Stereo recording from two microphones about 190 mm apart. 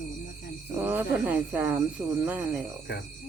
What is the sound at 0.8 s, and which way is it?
Speech, 10° right (ahead or behind).